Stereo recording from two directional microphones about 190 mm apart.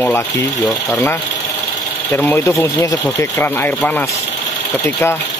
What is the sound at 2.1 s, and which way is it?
Speech, 10° left (ahead or behind).